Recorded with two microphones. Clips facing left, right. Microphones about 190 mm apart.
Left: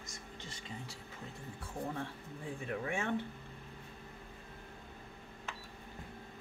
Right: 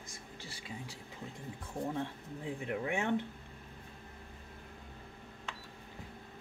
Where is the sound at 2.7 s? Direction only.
15° right (ahead or behind).